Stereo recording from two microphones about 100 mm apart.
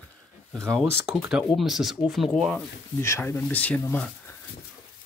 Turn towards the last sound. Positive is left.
turn(degrees=15)  # may be behind; listen again after turning